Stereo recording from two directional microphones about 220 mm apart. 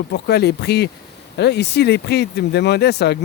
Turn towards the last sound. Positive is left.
turn(degrees=50)  # may be behind; listen again after turning